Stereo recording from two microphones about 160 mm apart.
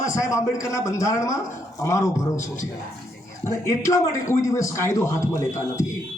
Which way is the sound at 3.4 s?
20° left (ahead or behind).